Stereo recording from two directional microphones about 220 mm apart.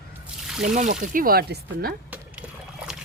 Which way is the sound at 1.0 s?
40° right (ahead or behind).